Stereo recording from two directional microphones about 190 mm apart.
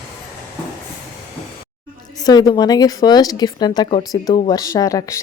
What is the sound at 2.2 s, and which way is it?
A woman's voice, 20° left (ahead or behind).